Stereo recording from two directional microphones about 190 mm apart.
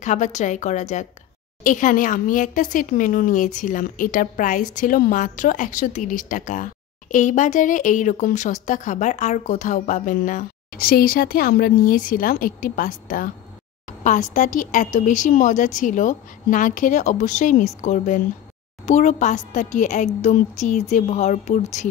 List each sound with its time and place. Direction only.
0.0 s speech: 40° left (ahead or behind)